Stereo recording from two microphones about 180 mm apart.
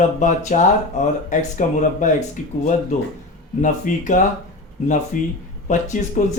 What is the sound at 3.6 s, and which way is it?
Speech, 45° left (ahead or behind).